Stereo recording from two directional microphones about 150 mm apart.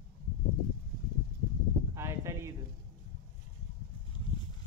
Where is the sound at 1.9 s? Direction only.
20° right (ahead or behind).